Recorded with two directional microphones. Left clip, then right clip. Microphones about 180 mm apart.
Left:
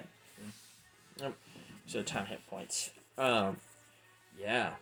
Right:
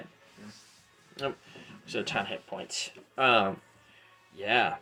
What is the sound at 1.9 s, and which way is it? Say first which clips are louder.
Speech: right 7 dB; 40° left (ahead or behind).